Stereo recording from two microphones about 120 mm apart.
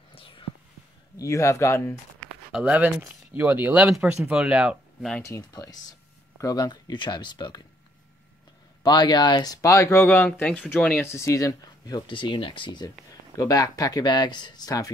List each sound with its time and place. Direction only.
0.1 s whispering: 50° left (ahead or behind)
1.1 s speech: 25° left (ahead or behind)
2.2 s a sound: 10° right (ahead or behind)
3.0 s speech: 15° right (ahead or behind)
5.2 s speech: 25° left (ahead or behind)
8.8 s speech: 35° left (ahead or behind); by 11.1 s 15° left (ahead or behind)
11.1 s speech: 25° left (ahead or behind)